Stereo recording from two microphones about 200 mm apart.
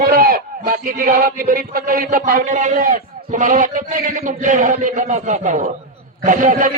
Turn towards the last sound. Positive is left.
turn(degrees=-40)  # may be behind; listen again after turning